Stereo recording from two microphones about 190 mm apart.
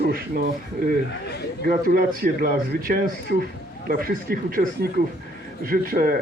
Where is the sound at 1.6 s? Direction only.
50° right (ahead or behind).